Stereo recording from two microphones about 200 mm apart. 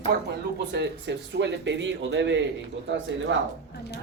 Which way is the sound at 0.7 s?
60° right (ahead or behind).